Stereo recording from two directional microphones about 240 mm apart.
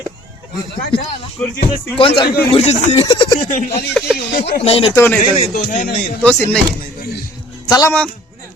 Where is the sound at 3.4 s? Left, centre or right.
Left.